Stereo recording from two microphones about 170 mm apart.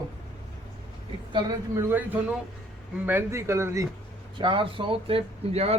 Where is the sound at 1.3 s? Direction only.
25° right (ahead or behind).